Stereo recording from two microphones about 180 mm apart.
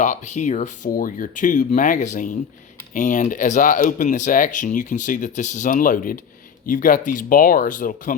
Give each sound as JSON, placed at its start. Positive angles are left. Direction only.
{"t": 0.0, "sound": "speech", "side_deg": 40}